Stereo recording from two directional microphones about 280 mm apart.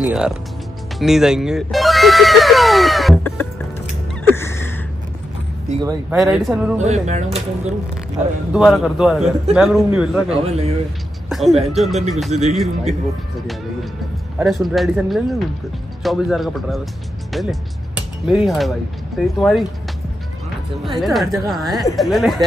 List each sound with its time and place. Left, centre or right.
0.0 s speech: centre
4.2 s a sound: centre
5.8 s speech: centre
6.8 s speech: right
8.5 s speech: centre
10.3 s speech: right
11.2 s music: centre
11.7 s speech: centre
12.3 s speech: right
14.4 s speech: centre
21.0 s speech: centre